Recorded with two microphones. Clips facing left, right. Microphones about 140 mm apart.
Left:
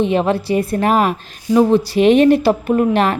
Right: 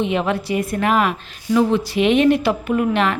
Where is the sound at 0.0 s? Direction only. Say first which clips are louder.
Left 4 dB; 35° left (ahead or behind).